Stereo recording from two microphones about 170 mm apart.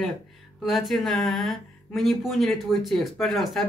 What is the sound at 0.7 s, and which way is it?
Speech, centre (ahead or behind).